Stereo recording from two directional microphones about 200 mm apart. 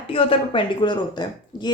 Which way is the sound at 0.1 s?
25° left (ahead or behind).